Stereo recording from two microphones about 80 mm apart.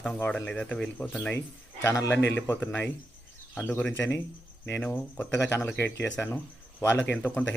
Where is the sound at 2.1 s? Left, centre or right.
Left.